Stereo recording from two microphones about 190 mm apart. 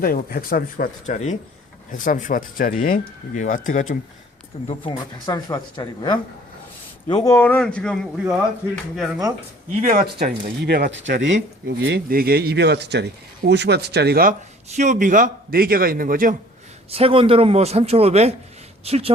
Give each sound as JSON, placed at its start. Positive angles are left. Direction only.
{"t": 0.0, "sound": "speech", "side_deg": 50}
{"t": 4.7, "sound": "speech", "side_deg": 25}
{"t": 7.3, "sound": "a man's voice", "side_deg": 10}
{"t": 9.8, "sound": "speech", "side_deg": -45}
{"t": 11.8, "sound": "speech", "side_deg": -60}
{"t": 14.8, "sound": "a man's voice", "side_deg": -40}
{"t": 16.9, "sound": "a man's voice", "side_deg": -30}